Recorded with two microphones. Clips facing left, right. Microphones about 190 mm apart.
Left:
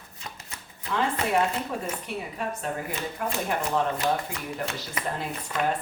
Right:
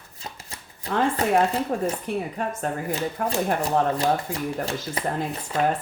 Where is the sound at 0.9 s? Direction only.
35° right (ahead or behind).